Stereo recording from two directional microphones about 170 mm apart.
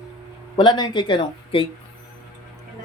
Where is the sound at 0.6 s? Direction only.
25° left (ahead or behind).